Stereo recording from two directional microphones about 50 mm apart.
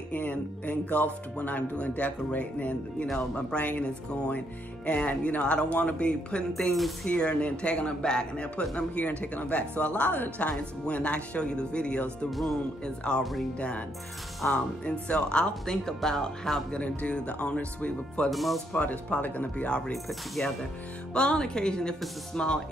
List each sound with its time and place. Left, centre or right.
0.1 s speech: left
8.7 s speech: left
12.3 s speech: centre
12.8 s speech: centre
16.7 s speech: left
18.3 s speech: centre
18.7 s speech: left
19.5 s speech: left
19.9 s speech: centre
21.1 s speech: centre